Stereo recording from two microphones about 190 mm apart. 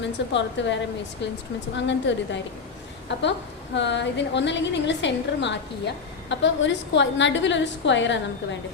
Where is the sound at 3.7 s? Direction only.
65° left (ahead or behind).